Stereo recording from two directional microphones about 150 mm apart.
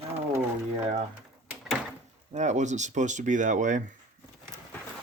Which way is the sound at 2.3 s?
50° right (ahead or behind).